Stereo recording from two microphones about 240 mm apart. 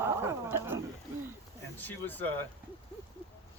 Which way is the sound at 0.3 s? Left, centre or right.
Centre.